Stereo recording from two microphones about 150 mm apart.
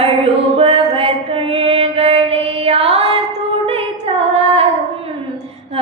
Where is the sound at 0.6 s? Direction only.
40° right (ahead or behind).